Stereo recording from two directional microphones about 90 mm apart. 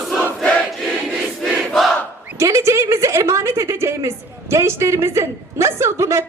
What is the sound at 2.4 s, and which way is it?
A woman's voice, 35° right (ahead or behind).